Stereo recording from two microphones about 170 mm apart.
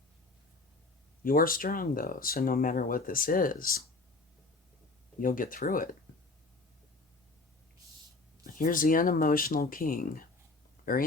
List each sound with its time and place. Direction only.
1.2 s speech: 55° left (ahead or behind)
5.2 s speech: 55° left (ahead or behind)
8.4 s speech: 55° left (ahead or behind)